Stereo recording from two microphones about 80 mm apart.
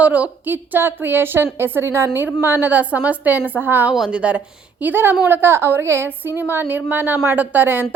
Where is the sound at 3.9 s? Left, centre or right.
Centre.